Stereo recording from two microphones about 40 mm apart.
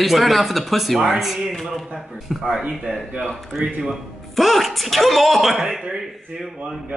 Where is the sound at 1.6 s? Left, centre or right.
Centre.